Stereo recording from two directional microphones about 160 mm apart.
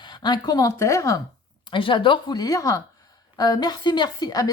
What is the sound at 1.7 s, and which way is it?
A woman's voice, 30° left (ahead or behind).